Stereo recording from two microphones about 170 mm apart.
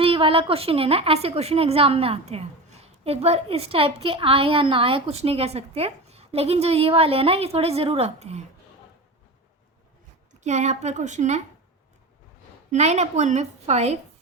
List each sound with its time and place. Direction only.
0.0 s a woman's voice: 30° right (ahead or behind)
10.4 s a woman's voice: 40° right (ahead or behind)
12.7 s a woman's voice: 40° right (ahead or behind)